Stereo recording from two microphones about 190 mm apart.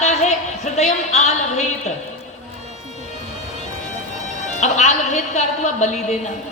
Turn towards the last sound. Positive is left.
turn(degrees=35)  # may be behind; listen again after turning